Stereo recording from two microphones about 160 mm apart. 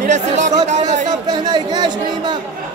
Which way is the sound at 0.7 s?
45° right (ahead or behind).